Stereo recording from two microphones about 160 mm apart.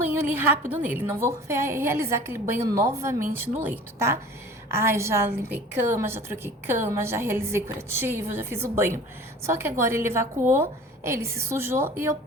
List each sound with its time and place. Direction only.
0.0 s a woman's voice: 10° right (ahead or behind)